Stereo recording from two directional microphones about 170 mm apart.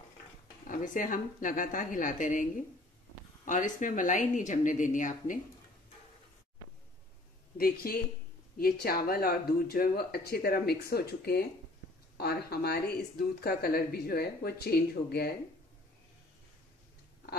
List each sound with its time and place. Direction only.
0.7 s a woman's voice: 50° left (ahead or behind)
7.5 s speech: 60° left (ahead or behind)